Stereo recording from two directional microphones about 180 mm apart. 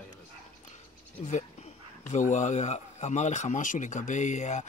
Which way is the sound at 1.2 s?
40° left (ahead or behind).